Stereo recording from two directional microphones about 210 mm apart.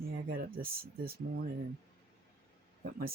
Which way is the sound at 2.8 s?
45° right (ahead or behind).